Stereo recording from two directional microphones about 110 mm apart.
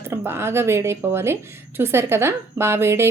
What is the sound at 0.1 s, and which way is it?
Speech, 20° right (ahead or behind).